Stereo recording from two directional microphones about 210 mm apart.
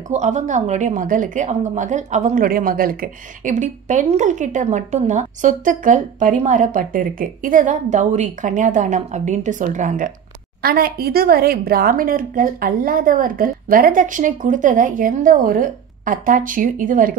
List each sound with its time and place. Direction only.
0.1 s a woman's voice: 35° right (ahead or behind)